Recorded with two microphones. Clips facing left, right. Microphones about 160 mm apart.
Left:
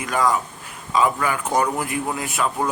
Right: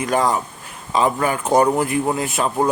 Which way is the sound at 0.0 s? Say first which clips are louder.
Right 2 dB; 30° right (ahead or behind).